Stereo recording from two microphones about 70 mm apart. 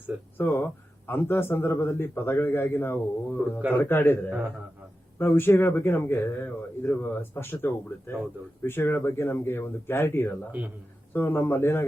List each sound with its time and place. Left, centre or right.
0.3 s speech: left
5.2 s speech: left